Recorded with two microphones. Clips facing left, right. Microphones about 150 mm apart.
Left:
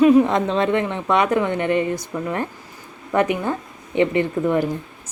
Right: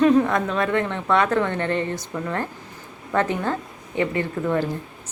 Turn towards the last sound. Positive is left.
turn(degrees=15)  # may be behind; listen again after turning